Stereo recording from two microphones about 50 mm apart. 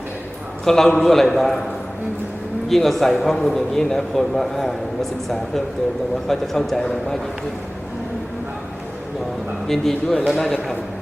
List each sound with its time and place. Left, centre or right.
0.6 s a man's voice: centre
2.6 s a man's voice: centre
6.2 s a man's voice: centre
9.6 s a man's voice: centre